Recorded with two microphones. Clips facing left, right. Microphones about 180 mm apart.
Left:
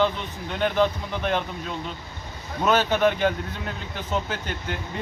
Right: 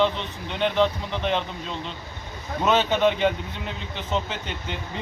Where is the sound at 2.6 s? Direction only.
5° left (ahead or behind).